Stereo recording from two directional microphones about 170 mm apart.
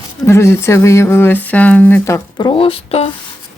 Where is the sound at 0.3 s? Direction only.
15° left (ahead or behind).